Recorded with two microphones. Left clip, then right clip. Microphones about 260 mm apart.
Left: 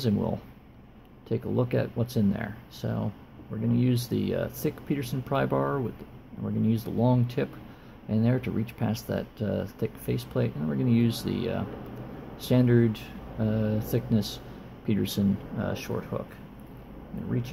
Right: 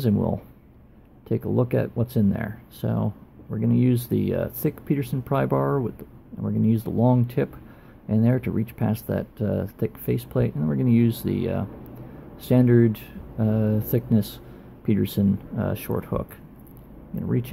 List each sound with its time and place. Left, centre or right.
0.0 s speech: right